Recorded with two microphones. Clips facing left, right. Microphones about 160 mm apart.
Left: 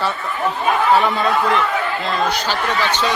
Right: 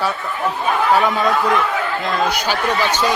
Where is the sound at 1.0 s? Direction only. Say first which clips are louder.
Right 1 dB; 10° right (ahead or behind).